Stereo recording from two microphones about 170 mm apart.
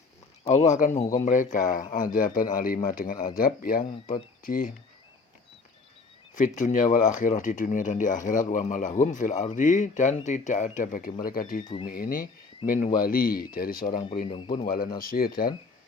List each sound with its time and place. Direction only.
0.5 s speech: 45° left (ahead or behind)
6.3 s speech: 50° left (ahead or behind)
14.3 s speech: 30° left (ahead or behind)
14.6 s speech: 60° left (ahead or behind)